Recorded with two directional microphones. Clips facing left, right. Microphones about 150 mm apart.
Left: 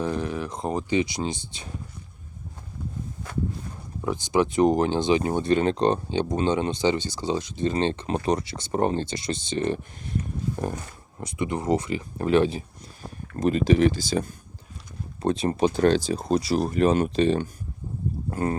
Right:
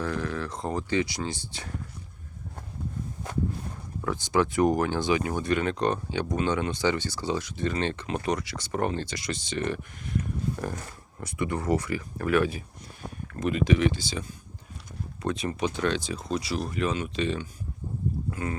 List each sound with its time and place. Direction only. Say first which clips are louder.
0.0 s speech: left 3 dB; 20° left (ahead or behind)
4.0 s speech: left 2 dB; 20° left (ahead or behind)
11.2 s speech: left 2 dB; 20° left (ahead or behind); by 14.3 s 45° left (ahead or behind)
15.2 s speech: left 6 dB; 30° left (ahead or behind)
18.3 s a sound: left 10 dB; 40° left (ahead or behind)